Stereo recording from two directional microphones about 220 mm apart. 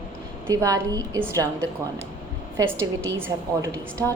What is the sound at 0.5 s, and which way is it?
Speech, 15° right (ahead or behind).